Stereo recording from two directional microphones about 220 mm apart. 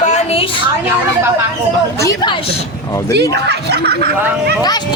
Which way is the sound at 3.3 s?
50° right (ahead or behind).